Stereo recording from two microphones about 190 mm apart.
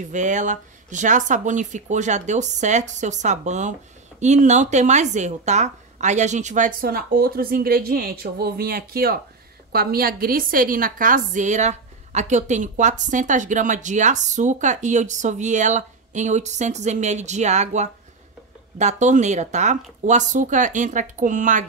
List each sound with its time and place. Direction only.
0.1 s a woman's voice: 40° right (ahead or behind)